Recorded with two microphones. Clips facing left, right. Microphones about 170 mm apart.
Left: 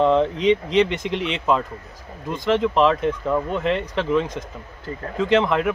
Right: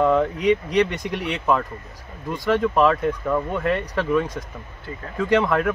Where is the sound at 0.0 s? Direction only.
25° left (ahead or behind).